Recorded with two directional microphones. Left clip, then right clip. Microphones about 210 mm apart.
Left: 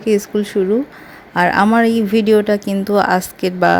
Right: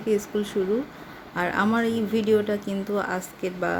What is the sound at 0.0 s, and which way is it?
Speech, 35° left (ahead or behind).